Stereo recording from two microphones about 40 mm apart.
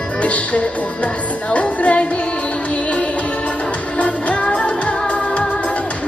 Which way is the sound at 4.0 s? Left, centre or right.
Left.